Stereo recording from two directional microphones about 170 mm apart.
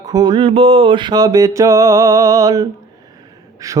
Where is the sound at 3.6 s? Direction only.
20° right (ahead or behind).